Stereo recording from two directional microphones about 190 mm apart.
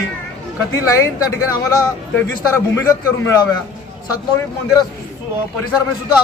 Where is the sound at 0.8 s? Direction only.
15° left (ahead or behind).